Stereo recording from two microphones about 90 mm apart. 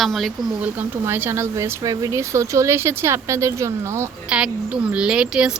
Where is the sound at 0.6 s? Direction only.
25° right (ahead or behind).